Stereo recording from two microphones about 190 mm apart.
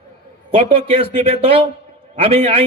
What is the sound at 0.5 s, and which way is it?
Speech, 30° right (ahead or behind).